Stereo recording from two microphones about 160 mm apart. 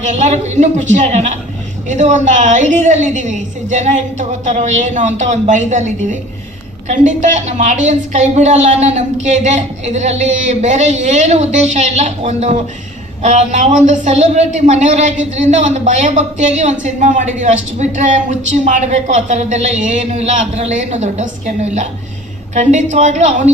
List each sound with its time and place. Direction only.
0.0 s a man's voice: 50° right (ahead or behind)